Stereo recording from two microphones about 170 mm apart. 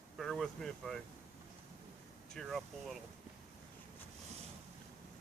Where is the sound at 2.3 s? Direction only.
Centre (ahead or behind).